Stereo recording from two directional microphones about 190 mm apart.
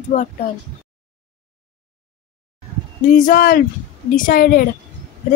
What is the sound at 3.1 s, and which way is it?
Speech, 45° left (ahead or behind).